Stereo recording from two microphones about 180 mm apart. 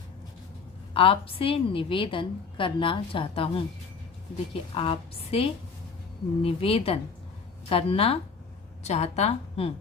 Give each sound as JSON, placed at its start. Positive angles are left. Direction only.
{"t": 0.9, "sound": "a woman's voice", "side_deg": 30}
{"t": 4.7, "sound": "speech", "side_deg": 30}